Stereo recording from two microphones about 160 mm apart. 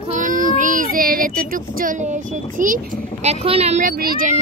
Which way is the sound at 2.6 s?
55° right (ahead or behind).